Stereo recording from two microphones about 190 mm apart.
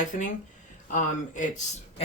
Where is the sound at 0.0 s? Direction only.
40° left (ahead or behind).